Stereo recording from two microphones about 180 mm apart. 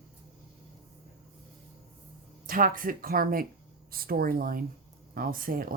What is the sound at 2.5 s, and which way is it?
Speech, 50° right (ahead or behind).